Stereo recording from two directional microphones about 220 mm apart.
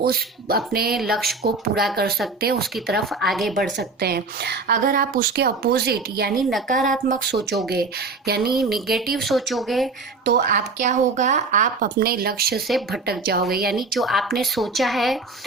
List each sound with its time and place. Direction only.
0.0 s a woman's voice: 45° right (ahead or behind)
0.9 s speech: centre (ahead or behind)
1.5 s a woman's voice: 45° right (ahead or behind)
3.0 s speech: centre (ahead or behind)
3.8 s a woman's voice: 45° right (ahead or behind)
6.7 s speech: centre (ahead or behind)
7.1 s a woman's voice: 45° right (ahead or behind)
8.7 s speech: centre (ahead or behind)
10.2 s a woman's voice: 50° right (ahead or behind)
10.6 s speech: 35° right (ahead or behind)
12.6 s speech: centre (ahead or behind)
13.1 s a woman's voice: 45° right (ahead or behind)
13.7 s speech: centre (ahead or behind)